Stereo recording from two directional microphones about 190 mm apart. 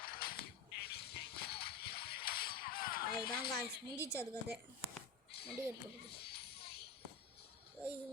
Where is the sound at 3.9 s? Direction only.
15° left (ahead or behind).